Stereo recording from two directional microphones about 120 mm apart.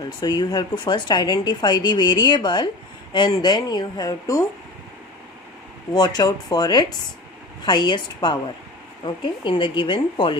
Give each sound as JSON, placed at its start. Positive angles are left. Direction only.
{"t": 0.0, "sound": "speech", "side_deg": 35}
{"t": 5.9, "sound": "a woman's voice", "side_deg": 35}